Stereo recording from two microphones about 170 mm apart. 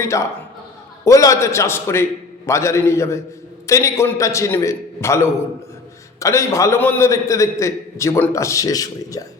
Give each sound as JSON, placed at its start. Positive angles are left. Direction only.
{"t": 0.0, "sound": "a man's voice", "side_deg": 15}